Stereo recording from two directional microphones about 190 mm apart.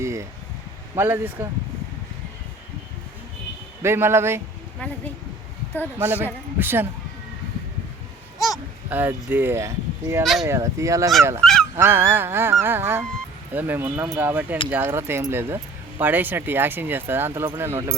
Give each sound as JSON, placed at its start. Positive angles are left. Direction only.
{"t": 0.0, "sound": "a sound", "side_deg": -15}
{"t": 0.9, "sound": "speech", "side_deg": -10}
{"t": 3.8, "sound": "speech", "side_deg": -15}
{"t": 4.8, "sound": "speech", "side_deg": 10}
{"t": 6.0, "sound": "speech", "side_deg": -10}
{"t": 8.9, "sound": "speech", "side_deg": -10}
{"t": 11.4, "sound": "speech", "side_deg": 5}
{"t": 11.8, "sound": "speech", "side_deg": -10}